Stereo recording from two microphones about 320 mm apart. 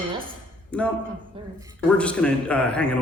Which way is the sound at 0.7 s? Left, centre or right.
Centre.